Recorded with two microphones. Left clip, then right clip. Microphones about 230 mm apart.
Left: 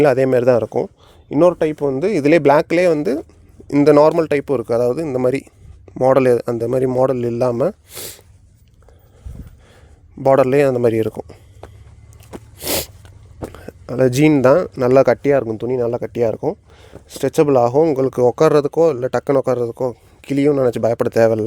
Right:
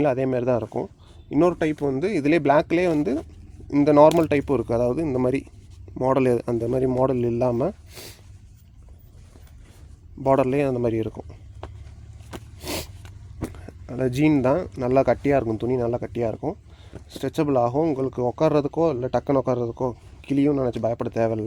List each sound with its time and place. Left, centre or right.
0.0 s speech: left
10.2 s speech: left
11.6 s a sound: centre
12.5 s sneeze: left
13.5 s speech: left